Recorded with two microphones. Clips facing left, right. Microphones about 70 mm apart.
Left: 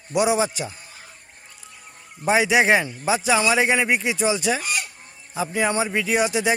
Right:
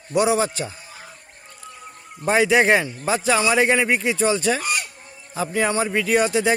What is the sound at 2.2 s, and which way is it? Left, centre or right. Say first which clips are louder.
Speech: right 1 dB; centre.